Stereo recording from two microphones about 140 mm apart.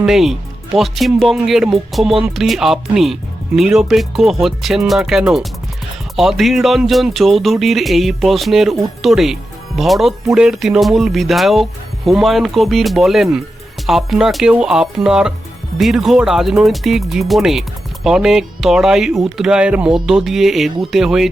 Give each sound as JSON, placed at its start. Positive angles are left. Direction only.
{"t": 0.0, "sound": "speech", "side_deg": -5}